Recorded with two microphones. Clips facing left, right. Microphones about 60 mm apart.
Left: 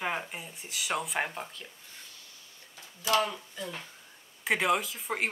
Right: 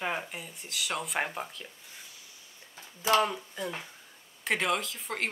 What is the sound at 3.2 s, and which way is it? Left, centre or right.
Speech, centre.